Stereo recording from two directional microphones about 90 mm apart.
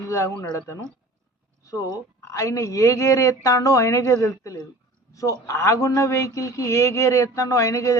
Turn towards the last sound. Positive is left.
turn(degrees=35)  # may be behind; listen again after turning